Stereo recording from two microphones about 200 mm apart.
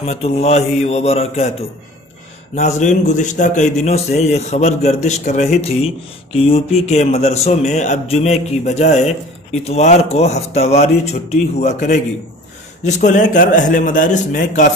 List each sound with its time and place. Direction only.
0.0 s speech: 30° left (ahead or behind)
2.5 s speech: 35° left (ahead or behind)